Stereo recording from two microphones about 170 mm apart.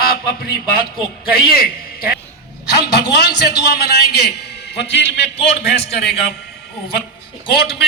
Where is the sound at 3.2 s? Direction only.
70° left (ahead or behind); by 5.3 s 90° left.